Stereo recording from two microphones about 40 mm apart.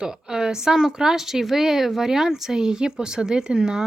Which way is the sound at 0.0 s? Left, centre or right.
Centre.